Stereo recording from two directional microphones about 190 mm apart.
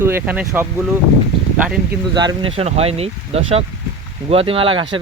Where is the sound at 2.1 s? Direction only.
25° right (ahead or behind).